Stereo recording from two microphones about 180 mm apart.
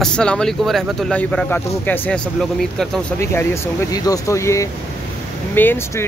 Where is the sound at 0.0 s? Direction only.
5° left (ahead or behind).